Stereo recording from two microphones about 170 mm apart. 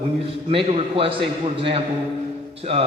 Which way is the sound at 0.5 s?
30° right (ahead or behind).